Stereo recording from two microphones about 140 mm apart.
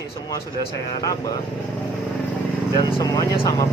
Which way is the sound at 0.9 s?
25° left (ahead or behind).